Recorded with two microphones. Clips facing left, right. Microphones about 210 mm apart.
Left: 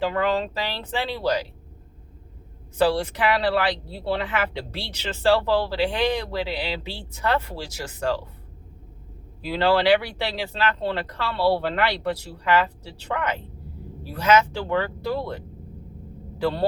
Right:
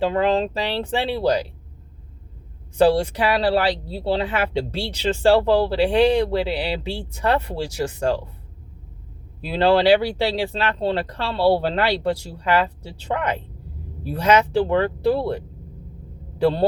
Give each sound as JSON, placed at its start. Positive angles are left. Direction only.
{"t": 0.0, "sound": "speech", "side_deg": -30}
{"t": 2.8, "sound": "speech", "side_deg": -30}
{"t": 9.5, "sound": "speech", "side_deg": -30}